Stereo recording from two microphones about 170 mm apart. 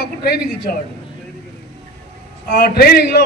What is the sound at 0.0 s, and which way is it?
Speech, 65° left (ahead or behind).